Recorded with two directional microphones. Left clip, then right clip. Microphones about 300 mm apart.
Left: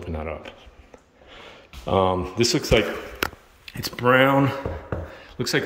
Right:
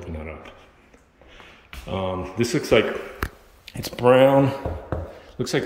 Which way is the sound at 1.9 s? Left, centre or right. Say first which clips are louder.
Left 7 dB; centre.